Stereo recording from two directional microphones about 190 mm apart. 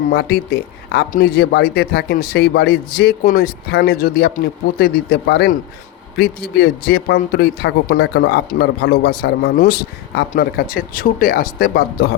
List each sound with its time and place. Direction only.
0.1 s speech: 55° left (ahead or behind)
7.9 s speech: 70° left (ahead or behind)
8.4 s a man's voice: 55° left (ahead or behind)